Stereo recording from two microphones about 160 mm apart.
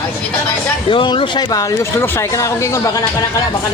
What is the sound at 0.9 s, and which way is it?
Speech, 30° left (ahead or behind).